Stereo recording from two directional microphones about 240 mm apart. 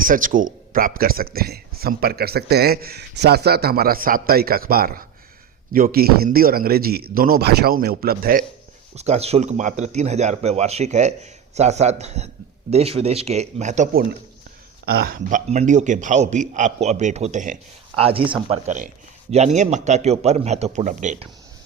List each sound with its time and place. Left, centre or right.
0.0 s speech: right
9.0 s a man's voice: right